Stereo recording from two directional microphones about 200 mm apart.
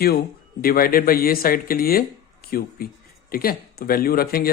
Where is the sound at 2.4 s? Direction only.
50° left (ahead or behind).